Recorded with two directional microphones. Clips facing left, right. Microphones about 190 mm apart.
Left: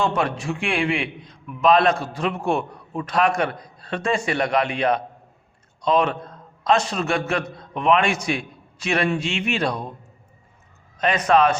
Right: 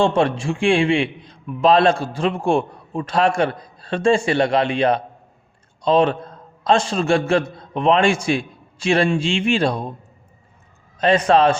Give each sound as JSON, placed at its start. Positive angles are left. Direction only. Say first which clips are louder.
{"t": 0.0, "sound": "a man's voice", "louder": "right 5 dB", "side_deg": -30}
{"t": 10.9, "sound": "a man's voice", "louder": "right 3 dB", "side_deg": -30}